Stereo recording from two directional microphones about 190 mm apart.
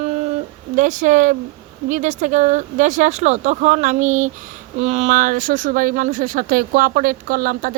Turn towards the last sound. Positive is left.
turn(degrees=-50)  # may be behind; listen again after turning